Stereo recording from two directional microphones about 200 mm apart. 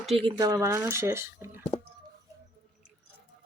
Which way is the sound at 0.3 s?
20° right (ahead or behind).